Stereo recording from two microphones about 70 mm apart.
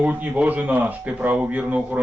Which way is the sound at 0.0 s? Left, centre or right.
Right.